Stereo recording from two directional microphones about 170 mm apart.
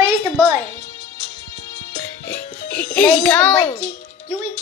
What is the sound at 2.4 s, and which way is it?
Music, 65° left (ahead or behind).